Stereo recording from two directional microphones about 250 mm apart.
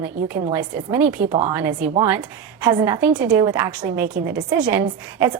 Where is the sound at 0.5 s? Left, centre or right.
Centre.